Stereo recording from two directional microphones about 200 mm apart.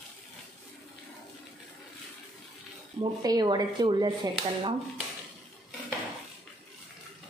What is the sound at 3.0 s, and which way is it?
Speech, 20° right (ahead or behind).